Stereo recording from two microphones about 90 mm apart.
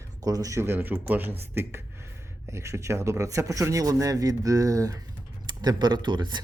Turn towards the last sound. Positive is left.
turn(degrees=-55)  # may be behind; listen again after turning